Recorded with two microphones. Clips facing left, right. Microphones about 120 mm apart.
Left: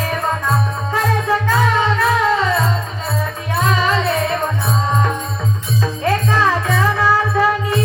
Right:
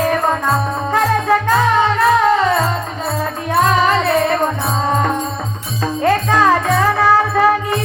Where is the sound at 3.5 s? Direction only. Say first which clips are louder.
Right 4 dB; 50° right (ahead or behind).